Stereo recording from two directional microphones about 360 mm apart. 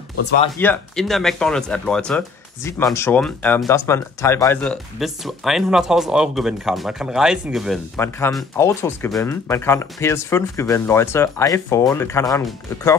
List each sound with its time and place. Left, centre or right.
0.6 s speech: centre